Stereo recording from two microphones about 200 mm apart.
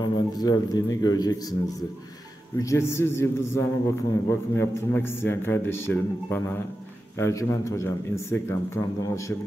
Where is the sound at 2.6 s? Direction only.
15° left (ahead or behind).